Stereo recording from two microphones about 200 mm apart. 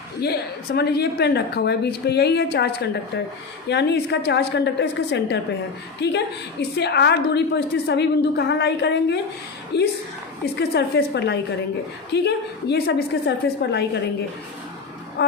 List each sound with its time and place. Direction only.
0.2 s a woman's voice: 55° left (ahead or behind)